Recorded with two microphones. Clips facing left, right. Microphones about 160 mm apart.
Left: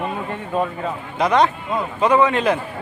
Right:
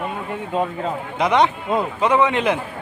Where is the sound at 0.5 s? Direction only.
20° right (ahead or behind).